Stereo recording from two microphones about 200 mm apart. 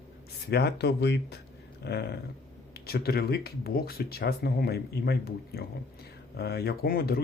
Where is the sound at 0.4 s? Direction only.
55° left (ahead or behind).